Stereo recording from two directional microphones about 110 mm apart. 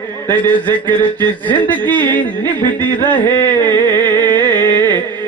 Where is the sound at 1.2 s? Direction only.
15° left (ahead or behind).